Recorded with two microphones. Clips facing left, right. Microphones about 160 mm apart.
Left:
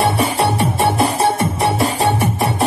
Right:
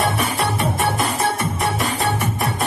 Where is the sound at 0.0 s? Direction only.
30° left (ahead or behind).